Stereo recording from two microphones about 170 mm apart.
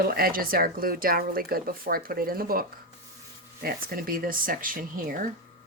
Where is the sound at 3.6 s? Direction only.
60° right (ahead or behind).